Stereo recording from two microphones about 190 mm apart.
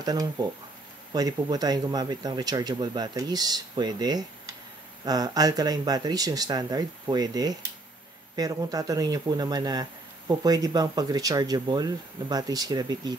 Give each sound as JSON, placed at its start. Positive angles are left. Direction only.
{"t": 0.0, "sound": "speech", "side_deg": -20}